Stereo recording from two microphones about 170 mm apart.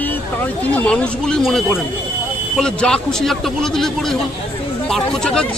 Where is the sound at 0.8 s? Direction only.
5° left (ahead or behind).